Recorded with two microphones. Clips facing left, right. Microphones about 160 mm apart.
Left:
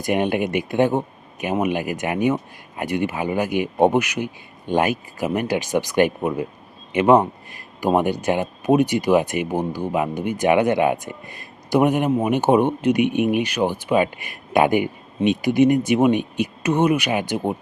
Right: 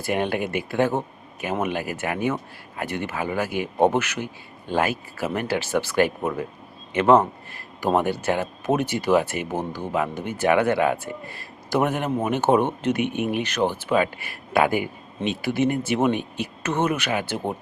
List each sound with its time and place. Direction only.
0.0 s speech: 15° left (ahead or behind)